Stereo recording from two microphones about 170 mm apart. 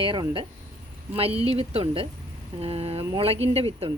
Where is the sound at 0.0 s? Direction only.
30° right (ahead or behind).